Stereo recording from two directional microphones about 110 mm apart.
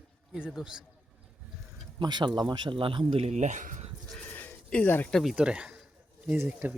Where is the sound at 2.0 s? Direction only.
40° right (ahead or behind).